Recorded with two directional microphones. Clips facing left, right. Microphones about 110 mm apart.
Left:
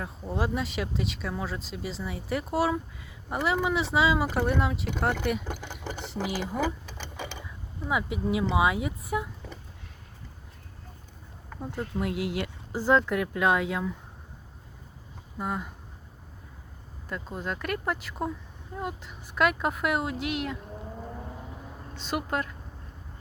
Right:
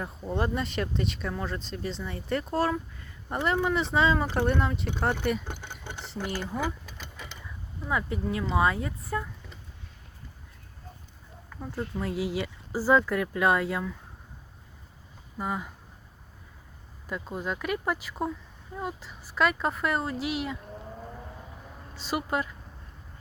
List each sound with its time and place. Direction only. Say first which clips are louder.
0.0 s speech: right 1 dB; centre (ahead or behind)
6.2 s speech: left 1 dB; 90° left
7.4 s speech: left 1 dB; 5° left (ahead or behind)
11.8 s speech: even; centre (ahead or behind)
15.4 s speech: even; centre (ahead or behind)
17.1 s speech: right 1 dB; 5° right (ahead or behind)
21.9 s speech: right 1 dB; 5° right (ahead or behind)